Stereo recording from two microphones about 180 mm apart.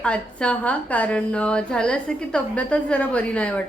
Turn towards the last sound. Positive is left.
turn(degrees=5)  # may be behind; listen again after turning